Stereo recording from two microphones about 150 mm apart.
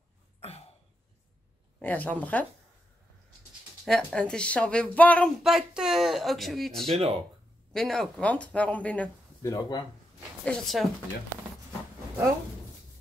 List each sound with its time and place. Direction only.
0.4 s a sound: 45° left (ahead or behind)
1.8 s speech: 10° left (ahead or behind)
3.8 s speech: 5° left (ahead or behind)
5.4 s speech: 5° right (ahead or behind)
7.0 s speech: 40° right (ahead or behind)
7.7 s speech: 5° left (ahead or behind)
9.5 s speech: 25° left (ahead or behind)
10.4 s speech: 5° left (ahead or behind)